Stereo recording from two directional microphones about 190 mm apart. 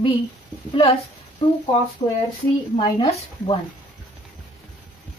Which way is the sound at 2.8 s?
30° left (ahead or behind).